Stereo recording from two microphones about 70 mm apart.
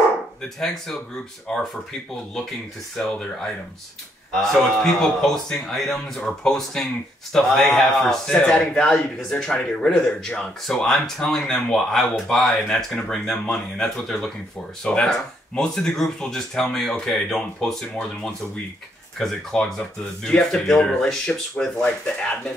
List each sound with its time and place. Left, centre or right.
1.5 s speech: centre
3.0 s speech: centre
19.1 s speech: centre